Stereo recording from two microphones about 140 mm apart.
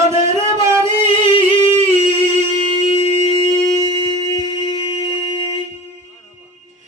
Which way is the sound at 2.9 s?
45° left (ahead or behind).